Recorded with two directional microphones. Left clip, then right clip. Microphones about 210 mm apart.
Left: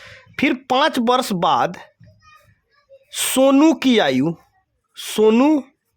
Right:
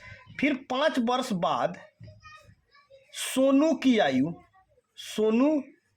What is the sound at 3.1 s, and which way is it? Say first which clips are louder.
Speech: left 9 dB; 55° left (ahead or behind).